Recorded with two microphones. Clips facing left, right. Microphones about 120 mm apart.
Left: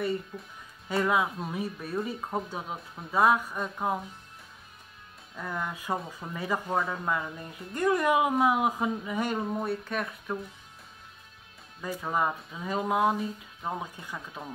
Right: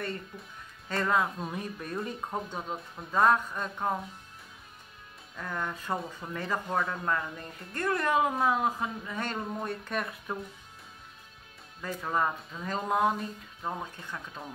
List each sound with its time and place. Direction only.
0.3 s speech: centre (ahead or behind)
5.3 s speech: 5° left (ahead or behind)
11.8 s speech: 10° left (ahead or behind)